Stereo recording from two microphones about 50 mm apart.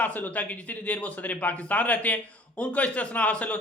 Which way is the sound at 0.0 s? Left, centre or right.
Left.